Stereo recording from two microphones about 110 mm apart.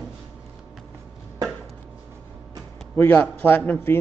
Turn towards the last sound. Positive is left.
turn(degrees=15)  # may be behind; listen again after turning